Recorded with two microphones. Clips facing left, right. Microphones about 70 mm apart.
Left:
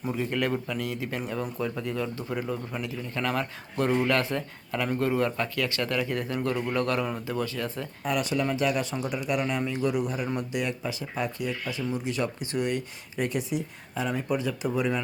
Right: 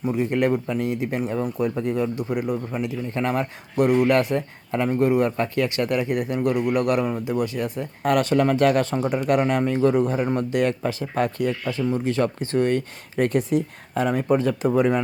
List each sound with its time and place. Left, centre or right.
0.0 s a man's voice: centre
8.0 s speech: right
11.6 s speech: right